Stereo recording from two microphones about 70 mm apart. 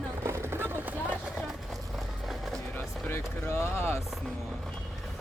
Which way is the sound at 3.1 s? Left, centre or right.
Left.